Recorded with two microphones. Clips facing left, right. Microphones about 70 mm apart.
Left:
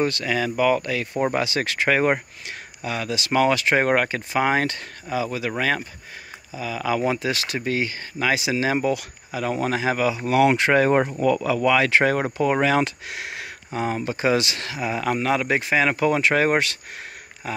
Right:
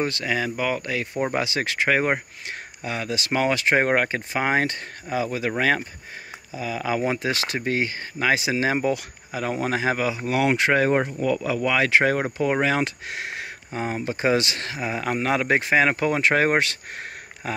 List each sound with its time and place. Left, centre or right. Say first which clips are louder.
0.0 s speech: left 2 dB; centre
2.8 s speech: left 1 dB; right
5.1 s speech: even; right
6.5 s speech: left 1 dB; right
10.2 s speech: left 3 dB; centre
11.4 s speech: left 3 dB; centre
13.1 s speech: right 1 dB; right
15.2 s speech: right 3 dB; right
17.4 s speech: even; right